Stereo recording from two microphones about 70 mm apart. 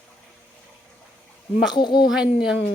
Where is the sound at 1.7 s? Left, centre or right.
Left.